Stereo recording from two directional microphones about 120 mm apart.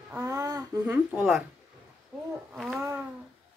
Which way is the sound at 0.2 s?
30° right (ahead or behind).